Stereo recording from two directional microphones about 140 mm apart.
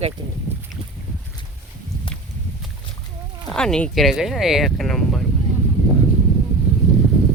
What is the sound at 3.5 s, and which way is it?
Speech, 5° left (ahead or behind).